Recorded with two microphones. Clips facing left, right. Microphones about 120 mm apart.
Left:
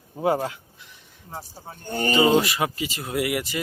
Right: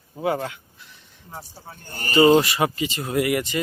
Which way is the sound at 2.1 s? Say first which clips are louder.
Right 4 dB; centre (ahead or behind).